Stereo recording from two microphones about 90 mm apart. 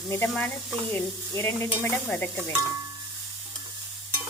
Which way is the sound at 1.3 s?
30° left (ahead or behind).